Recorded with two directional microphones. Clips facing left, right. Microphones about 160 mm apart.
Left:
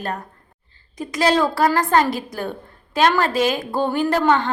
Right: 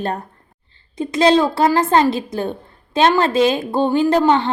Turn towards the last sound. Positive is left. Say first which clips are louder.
# right 3 dB
turn(degrees=-20)  # may be behind; listen again after turning